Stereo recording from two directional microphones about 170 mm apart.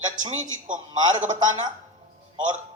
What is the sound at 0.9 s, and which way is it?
Speech, 25° right (ahead or behind).